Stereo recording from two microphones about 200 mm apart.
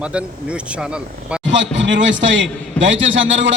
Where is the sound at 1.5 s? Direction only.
65° right (ahead or behind).